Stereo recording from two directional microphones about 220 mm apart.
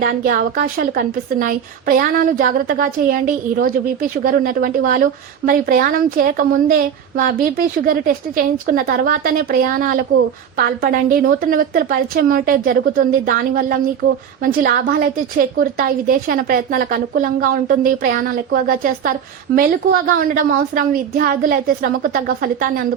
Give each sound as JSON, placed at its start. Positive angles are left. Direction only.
{"t": 0.0, "sound": "a woman's voice", "side_deg": -40}